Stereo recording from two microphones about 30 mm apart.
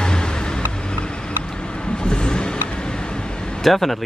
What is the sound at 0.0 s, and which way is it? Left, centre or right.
Vehicle, left.